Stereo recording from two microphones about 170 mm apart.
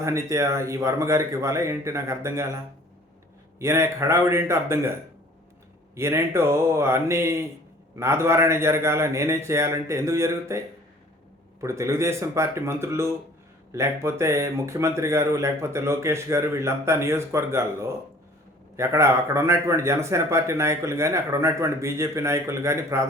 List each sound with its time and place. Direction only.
0.0 s speech: 15° right (ahead or behind)
3.6 s speech: 15° right (ahead or behind)
6.0 s speech: 15° right (ahead or behind)
11.6 s speech: 15° right (ahead or behind)